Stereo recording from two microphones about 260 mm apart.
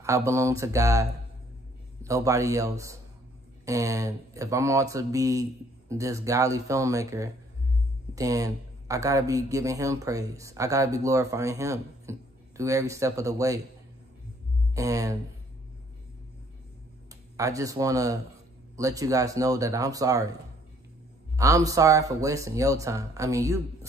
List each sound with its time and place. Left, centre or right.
0.0 s speech: centre
2.0 s speech: centre
14.8 s speech: centre
17.1 s speech: centre
21.4 s speech: centre